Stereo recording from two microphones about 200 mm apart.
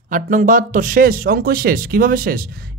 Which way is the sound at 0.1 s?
40° right (ahead or behind).